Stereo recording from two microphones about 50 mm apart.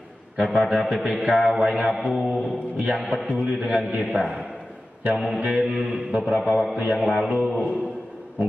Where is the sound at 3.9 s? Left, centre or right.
Centre.